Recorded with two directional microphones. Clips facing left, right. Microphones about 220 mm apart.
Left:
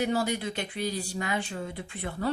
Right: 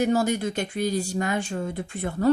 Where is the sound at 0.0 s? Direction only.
45° right (ahead or behind).